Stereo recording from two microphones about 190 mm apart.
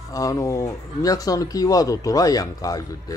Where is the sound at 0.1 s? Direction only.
15° left (ahead or behind).